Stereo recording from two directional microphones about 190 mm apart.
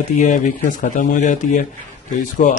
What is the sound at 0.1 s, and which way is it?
A man's voice, 40° left (ahead or behind).